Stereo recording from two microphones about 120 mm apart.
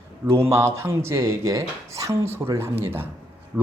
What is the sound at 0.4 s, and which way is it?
A man's voice, 20° right (ahead or behind).